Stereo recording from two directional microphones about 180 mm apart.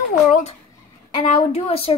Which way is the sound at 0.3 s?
35° left (ahead or behind).